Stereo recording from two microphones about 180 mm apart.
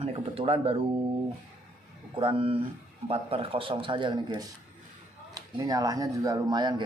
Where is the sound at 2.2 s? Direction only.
30° right (ahead or behind).